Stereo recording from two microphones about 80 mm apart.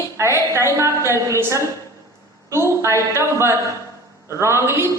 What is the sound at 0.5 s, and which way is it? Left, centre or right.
A man's voice, right.